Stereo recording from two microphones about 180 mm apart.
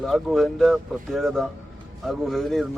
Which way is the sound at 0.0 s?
Centre (ahead or behind).